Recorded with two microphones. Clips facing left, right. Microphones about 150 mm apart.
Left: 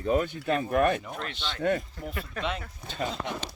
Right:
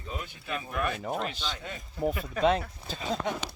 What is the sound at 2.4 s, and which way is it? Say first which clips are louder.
Speech: right 8 dB; 40° right (ahead or behind).